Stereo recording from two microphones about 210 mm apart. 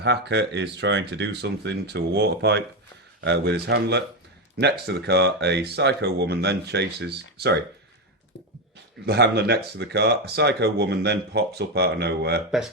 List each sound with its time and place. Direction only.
0.0 s speech: 55° right (ahead or behind)
9.0 s speech: 50° right (ahead or behind)